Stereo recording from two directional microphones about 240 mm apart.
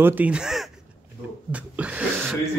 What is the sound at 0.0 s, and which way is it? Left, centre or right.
Speech, centre.